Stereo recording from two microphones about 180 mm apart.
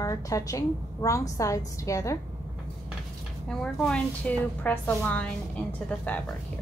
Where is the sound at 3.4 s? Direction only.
5° left (ahead or behind).